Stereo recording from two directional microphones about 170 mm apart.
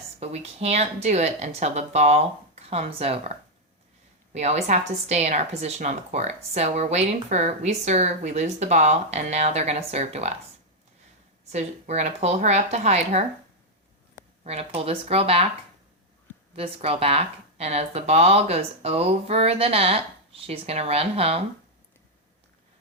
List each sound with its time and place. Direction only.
0.2 s a woman's voice: 40° right (ahead or behind)
11.5 s speech: 40° right (ahead or behind)
14.4 s speech: 35° right (ahead or behind)
16.6 s speech: 35° right (ahead or behind)